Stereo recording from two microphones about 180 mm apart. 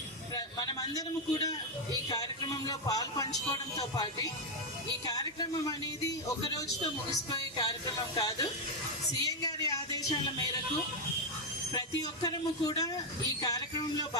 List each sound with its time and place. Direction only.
0.3 s a man's voice: 20° left (ahead or behind)
11.7 s speech: 20° left (ahead or behind)